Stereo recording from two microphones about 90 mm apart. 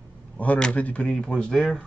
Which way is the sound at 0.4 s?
15° left (ahead or behind).